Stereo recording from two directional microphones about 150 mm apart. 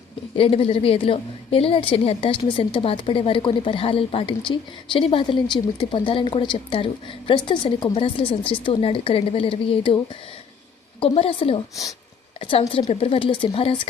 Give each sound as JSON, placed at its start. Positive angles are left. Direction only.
{"t": 0.3, "sound": "speech", "side_deg": 40}
{"t": 11.0, "sound": "speech", "side_deg": 40}